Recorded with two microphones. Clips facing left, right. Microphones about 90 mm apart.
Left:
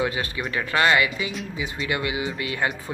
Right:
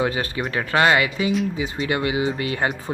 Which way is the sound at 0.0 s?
35° right (ahead or behind).